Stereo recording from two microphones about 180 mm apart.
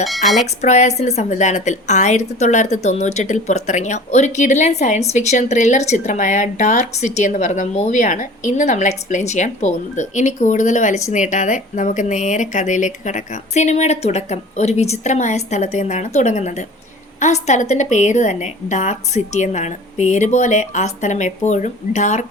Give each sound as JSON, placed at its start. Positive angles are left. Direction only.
{"t": 0.6, "sound": "a woman's voice", "side_deg": 40}